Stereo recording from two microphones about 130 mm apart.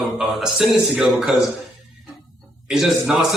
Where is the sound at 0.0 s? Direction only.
Centre (ahead or behind).